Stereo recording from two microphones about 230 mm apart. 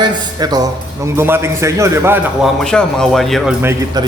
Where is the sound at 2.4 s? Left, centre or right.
Centre.